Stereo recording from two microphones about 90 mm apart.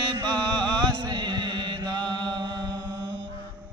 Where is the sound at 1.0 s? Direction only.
55° right (ahead or behind).